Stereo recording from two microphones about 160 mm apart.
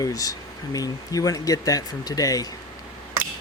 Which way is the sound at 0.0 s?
20° left (ahead or behind).